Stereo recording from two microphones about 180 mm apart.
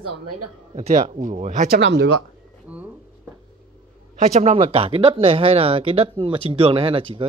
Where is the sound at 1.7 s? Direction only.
80° right.